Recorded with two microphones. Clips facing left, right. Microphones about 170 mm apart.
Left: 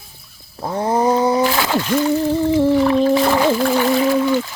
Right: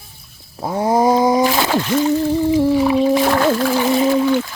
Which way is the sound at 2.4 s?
15° right (ahead or behind).